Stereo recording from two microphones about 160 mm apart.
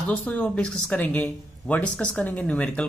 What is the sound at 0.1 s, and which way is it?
Speech, 10° left (ahead or behind).